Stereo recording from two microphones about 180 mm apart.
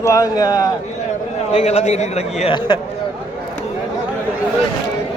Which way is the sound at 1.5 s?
35° left (ahead or behind).